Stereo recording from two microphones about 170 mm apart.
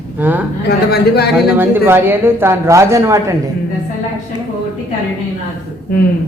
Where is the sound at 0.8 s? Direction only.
70° left (ahead or behind).